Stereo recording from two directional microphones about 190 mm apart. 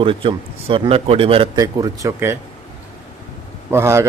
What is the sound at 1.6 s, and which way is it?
Speech, 20° right (ahead or behind).